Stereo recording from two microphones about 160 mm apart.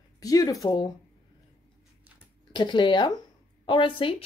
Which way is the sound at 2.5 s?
30° left (ahead or behind).